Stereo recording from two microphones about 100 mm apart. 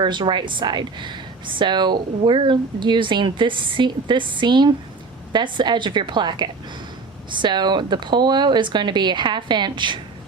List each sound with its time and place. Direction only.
0.0 s speech: 50° right (ahead or behind)